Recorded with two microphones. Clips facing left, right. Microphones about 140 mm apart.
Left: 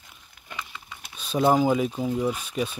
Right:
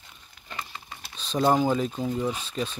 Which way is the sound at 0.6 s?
45° right (ahead or behind).